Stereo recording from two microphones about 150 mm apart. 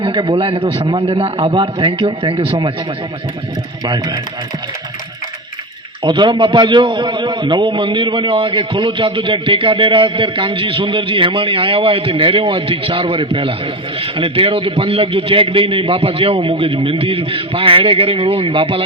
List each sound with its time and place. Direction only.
0.0 s a man's voice: 35° right (ahead or behind)
3.8 s speech: 30° right (ahead or behind)
6.0 s a man's voice: 30° right (ahead or behind)